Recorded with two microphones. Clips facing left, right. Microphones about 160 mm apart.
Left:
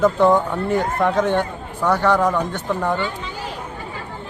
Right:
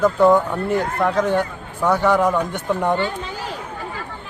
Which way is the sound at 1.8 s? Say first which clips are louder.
Right 1 dB; 10° right (ahead or behind).